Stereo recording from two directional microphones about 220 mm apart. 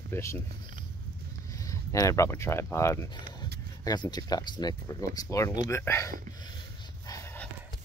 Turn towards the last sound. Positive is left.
turn(degrees=10)  # may be behind; listen again after turning